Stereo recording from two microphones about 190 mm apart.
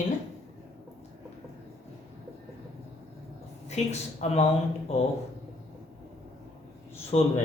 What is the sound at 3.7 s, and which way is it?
Speech, 35° left (ahead or behind).